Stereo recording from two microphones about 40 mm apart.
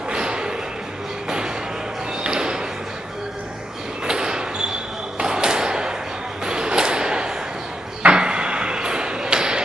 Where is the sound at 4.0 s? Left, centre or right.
Centre.